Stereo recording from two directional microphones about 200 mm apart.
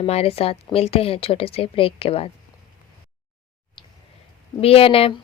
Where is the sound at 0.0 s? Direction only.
30° left (ahead or behind).